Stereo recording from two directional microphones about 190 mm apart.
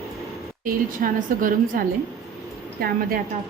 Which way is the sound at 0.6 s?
45° right (ahead or behind).